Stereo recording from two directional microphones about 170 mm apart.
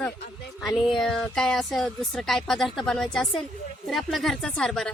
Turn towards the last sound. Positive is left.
turn(degrees=0)  # may be behind; listen again after turning